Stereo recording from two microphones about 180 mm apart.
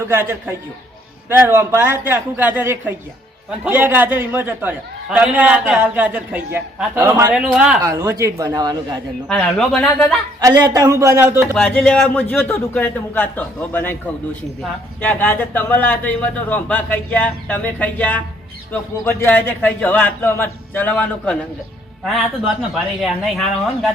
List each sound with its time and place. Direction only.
0.1 s a man's voice: 15° right (ahead or behind)
7.8 s a man's voice: 15° right (ahead or behind)
9.3 s speech: 5° left (ahead or behind)
10.4 s a man's voice: 20° right (ahead or behind)
11.5 s speech: 5° left (ahead or behind)